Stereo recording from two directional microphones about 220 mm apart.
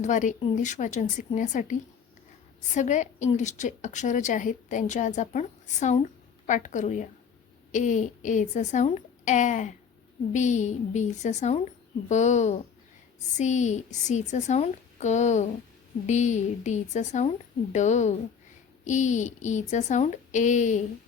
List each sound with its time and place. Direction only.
0.0 s a woman's voice: 35° left (ahead or behind)
2.7 s a woman's voice: 35° left (ahead or behind)